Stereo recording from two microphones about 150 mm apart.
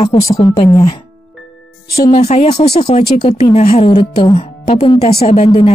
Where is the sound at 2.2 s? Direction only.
45° left (ahead or behind).